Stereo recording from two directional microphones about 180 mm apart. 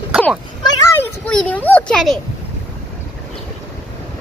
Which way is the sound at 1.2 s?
10° left (ahead or behind).